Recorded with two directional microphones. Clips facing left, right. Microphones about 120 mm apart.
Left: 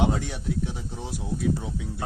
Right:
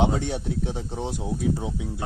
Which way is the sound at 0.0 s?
30° right (ahead or behind).